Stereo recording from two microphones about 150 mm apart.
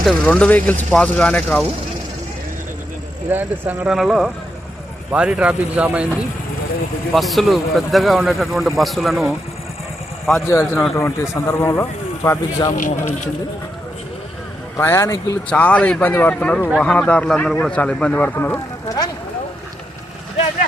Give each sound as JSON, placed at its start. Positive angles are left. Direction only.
{"t": 0.0, "sound": "speech", "side_deg": 10}
{"t": 3.2, "sound": "a man's voice", "side_deg": -10}
{"t": 7.1, "sound": "a man's voice", "side_deg": 0}
{"t": 10.4, "sound": "a man's voice", "side_deg": 20}
{"t": 12.7, "sound": "speech", "side_deg": 60}
{"t": 14.8, "sound": "a man's voice", "side_deg": 20}
{"t": 15.4, "sound": "speech", "side_deg": 10}